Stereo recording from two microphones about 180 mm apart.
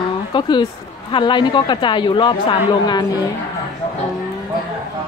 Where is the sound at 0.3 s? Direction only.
25° left (ahead or behind).